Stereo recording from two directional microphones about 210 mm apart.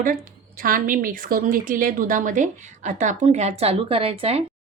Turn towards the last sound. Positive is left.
turn(degrees=-30)  # may be behind; listen again after turning